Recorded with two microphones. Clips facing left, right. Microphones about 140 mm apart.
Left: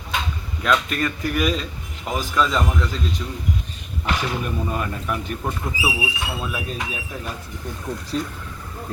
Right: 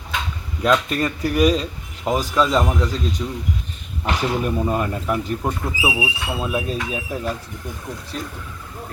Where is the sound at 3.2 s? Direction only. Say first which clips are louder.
Right 4 dB; 20° right (ahead or behind).